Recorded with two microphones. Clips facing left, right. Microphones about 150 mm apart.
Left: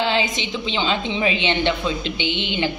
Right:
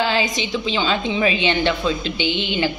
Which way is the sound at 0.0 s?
25° left (ahead or behind).